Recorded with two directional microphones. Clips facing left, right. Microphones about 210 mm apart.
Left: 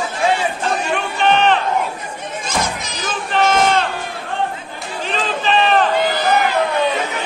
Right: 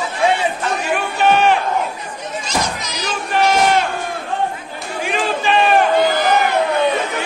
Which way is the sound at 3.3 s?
10° right (ahead or behind).